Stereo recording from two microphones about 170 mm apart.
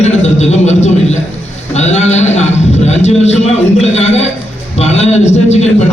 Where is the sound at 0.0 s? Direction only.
40° left (ahead or behind).